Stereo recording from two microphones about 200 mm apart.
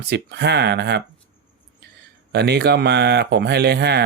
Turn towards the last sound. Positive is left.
turn(degrees=-55)  # may be behind; listen again after turning